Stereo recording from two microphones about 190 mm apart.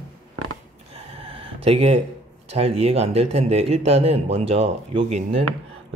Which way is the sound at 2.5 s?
35° right (ahead or behind).